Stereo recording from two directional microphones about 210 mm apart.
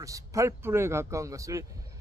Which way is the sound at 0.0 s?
15° right (ahead or behind).